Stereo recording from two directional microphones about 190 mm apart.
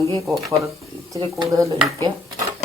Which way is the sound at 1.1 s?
20° right (ahead or behind).